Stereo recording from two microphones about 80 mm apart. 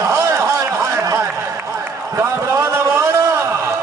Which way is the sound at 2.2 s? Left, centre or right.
Right.